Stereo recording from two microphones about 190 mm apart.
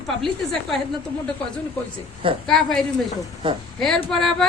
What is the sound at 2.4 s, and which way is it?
Speech, centre (ahead or behind).